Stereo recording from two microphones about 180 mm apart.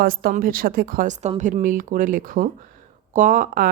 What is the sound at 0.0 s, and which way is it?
Speech, 55° right (ahead or behind).